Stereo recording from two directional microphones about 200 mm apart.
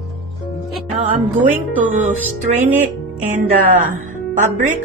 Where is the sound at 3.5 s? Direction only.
40° right (ahead or behind).